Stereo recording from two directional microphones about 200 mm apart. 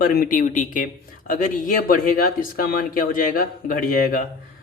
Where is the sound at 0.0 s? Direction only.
45° left (ahead or behind).